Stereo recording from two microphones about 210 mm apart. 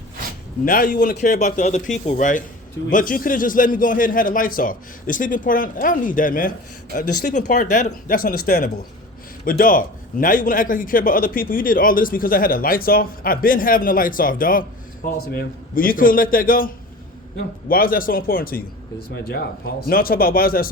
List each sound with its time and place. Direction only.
0.6 s a man's voice: 45° left (ahead or behind)